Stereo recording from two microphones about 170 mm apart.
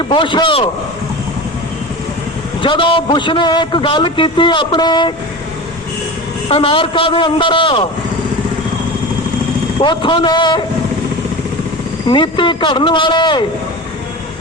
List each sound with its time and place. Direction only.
0.0 s a man's voice: 30° left (ahead or behind)
2.6 s a man's voice: 30° left (ahead or behind)
6.5 s a man's voice: 30° left (ahead or behind)
9.8 s a man's voice: 30° left (ahead or behind)
12.0 s a man's voice: 30° left (ahead or behind)